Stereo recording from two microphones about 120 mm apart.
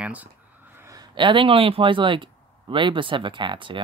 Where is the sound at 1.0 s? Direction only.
45° right (ahead or behind).